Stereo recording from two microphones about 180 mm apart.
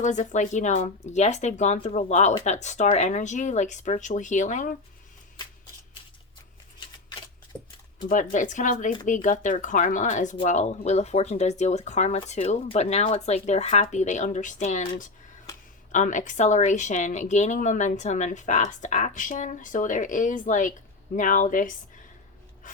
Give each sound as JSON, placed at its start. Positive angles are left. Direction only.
{"t": 0.0, "sound": "speech", "side_deg": 45}
{"t": 8.1, "sound": "speech", "side_deg": 45}
{"t": 22.6, "sound": "pant", "side_deg": 50}